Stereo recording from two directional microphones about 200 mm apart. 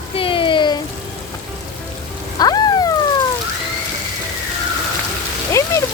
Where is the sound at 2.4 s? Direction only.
20° left (ahead or behind).